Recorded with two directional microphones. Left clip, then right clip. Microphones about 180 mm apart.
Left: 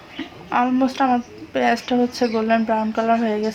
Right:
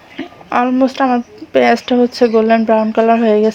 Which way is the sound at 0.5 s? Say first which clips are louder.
Right 6 dB; 40° right (ahead or behind).